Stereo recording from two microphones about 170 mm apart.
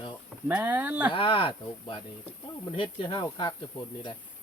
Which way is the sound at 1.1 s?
30° left (ahead or behind).